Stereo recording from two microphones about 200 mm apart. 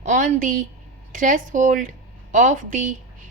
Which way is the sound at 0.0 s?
40° right (ahead or behind).